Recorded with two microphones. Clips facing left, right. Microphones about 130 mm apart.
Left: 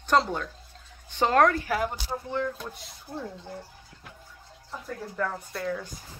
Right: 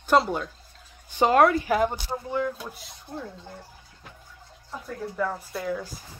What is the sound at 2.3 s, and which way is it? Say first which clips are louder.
Speech: right 3 dB; 10° right (ahead or behind).